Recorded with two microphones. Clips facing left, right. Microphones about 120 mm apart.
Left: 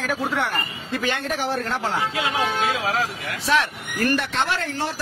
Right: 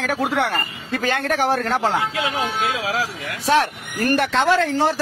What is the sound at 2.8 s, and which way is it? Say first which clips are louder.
Speech: even; 90° right.